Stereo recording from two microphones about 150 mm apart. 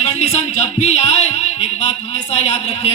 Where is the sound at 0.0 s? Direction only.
45° left (ahead or behind).